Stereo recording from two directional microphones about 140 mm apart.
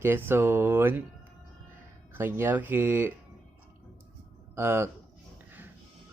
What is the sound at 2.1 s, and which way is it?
Speech, 15° right (ahead or behind).